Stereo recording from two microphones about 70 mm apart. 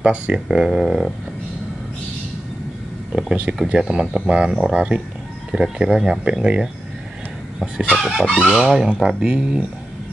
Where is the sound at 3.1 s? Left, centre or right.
Centre.